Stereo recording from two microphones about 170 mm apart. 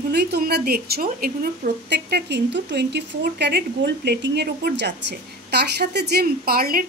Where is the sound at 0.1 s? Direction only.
70° right (ahead or behind).